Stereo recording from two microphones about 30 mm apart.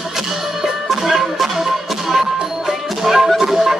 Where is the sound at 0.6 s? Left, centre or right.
Centre.